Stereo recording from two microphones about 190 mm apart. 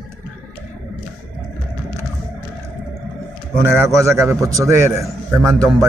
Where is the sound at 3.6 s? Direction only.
15° right (ahead or behind).